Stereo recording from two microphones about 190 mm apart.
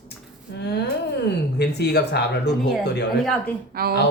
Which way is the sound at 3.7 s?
55° right (ahead or behind).